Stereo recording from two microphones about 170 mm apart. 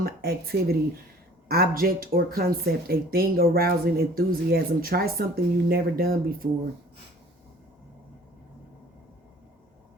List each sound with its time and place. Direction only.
0.0 s speech: 65° right (ahead or behind)